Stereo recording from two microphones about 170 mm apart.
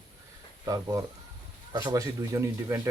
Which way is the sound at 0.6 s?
20° right (ahead or behind).